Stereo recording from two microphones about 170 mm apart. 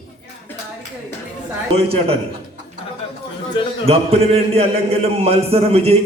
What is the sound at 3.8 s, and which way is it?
A man's voice, 35° right (ahead or behind).